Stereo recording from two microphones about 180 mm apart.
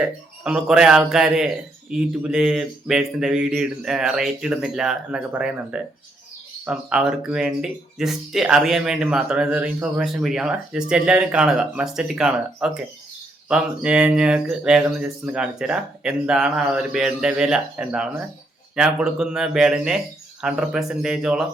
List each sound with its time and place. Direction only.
0.4 s speech: 5° right (ahead or behind)